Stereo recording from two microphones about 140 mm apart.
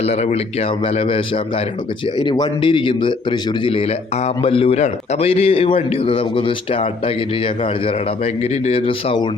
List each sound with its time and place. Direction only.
0.0 s a man's voice: 50° left (ahead or behind)